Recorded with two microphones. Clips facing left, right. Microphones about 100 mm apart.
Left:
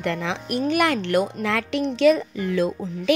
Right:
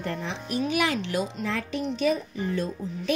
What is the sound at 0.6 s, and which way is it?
Speech, 55° left (ahead or behind).